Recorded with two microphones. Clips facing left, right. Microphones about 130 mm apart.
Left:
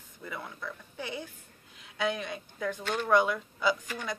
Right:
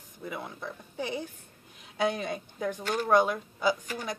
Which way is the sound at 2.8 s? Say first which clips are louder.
Right 2 dB; 40° right (ahead or behind).